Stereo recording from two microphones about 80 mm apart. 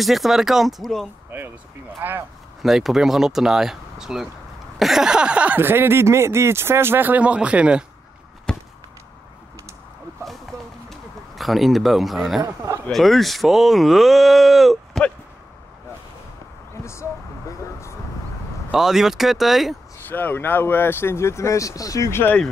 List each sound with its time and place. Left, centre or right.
0.0 s speech: centre
1.3 s speech: right
2.6 s speech: centre
4.7 s a sound: centre
5.6 s speech: right
8.5 s a sound: centre
10.5 s a sound: right
10.9 s speech: centre
16.8 s a sound: left
18.7 s speech: centre
20.1 s speech: left
22.1 s speech: left